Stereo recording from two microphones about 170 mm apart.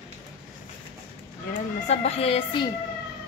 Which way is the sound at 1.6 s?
40° left (ahead or behind).